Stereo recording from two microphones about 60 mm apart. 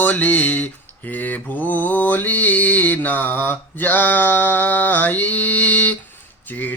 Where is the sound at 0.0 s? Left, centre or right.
Left.